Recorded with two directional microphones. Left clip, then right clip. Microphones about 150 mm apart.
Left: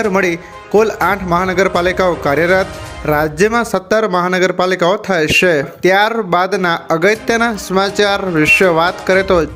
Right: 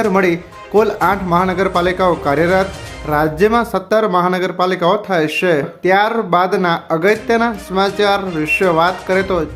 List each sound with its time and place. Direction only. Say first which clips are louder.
0.0 s speech: even; 20° left (ahead or behind)